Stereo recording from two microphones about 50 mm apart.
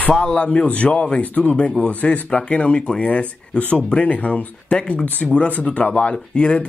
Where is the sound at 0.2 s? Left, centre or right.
Centre.